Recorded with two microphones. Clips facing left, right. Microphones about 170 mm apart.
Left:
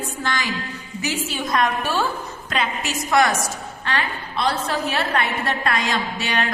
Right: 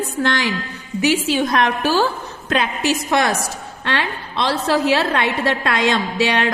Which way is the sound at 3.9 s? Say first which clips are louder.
Right 3 dB; 80° right.